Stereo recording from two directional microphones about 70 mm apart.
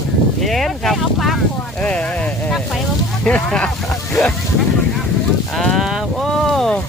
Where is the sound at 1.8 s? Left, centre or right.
Centre.